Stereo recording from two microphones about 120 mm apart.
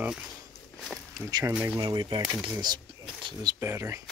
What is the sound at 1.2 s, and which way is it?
Speech, 25° right (ahead or behind).